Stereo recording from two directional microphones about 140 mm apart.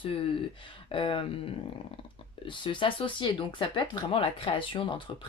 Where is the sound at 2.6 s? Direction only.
35° left (ahead or behind).